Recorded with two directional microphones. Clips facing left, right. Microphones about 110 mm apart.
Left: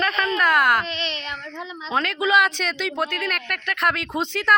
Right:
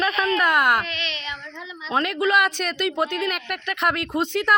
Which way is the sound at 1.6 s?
35° left (ahead or behind).